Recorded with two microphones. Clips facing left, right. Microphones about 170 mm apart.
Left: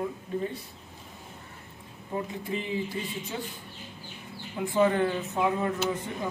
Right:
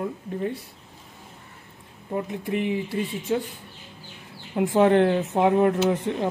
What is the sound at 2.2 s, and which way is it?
Speech, 70° right (ahead or behind).